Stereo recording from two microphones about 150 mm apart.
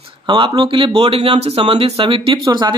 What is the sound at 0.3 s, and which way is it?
A man's voice, 30° right (ahead or behind).